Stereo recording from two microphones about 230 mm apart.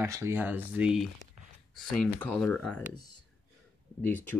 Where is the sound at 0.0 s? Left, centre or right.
Centre.